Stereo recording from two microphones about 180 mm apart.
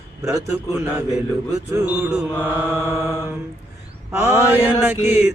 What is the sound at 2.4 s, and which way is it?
Mantra, 10° right (ahead or behind).